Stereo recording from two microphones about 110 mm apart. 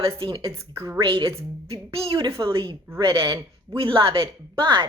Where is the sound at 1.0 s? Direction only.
50° right (ahead or behind).